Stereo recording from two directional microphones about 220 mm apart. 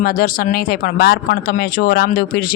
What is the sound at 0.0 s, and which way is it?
Speech, 40° left (ahead or behind).